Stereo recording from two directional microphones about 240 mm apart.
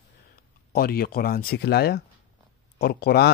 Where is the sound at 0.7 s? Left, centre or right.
Left.